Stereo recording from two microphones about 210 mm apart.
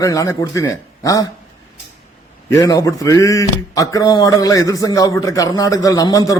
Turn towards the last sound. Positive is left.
turn(degrees=15)  # may be behind; listen again after turning